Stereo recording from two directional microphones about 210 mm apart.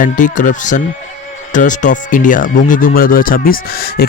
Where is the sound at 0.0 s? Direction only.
40° left (ahead or behind).